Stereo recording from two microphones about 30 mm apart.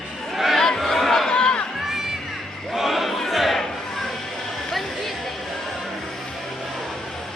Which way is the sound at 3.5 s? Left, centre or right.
Centre.